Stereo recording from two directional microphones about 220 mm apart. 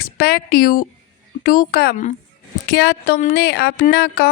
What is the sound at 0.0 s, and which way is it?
A woman's voice, 40° left (ahead or behind).